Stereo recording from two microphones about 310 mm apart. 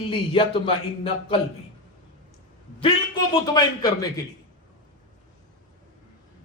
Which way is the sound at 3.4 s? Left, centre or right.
Centre.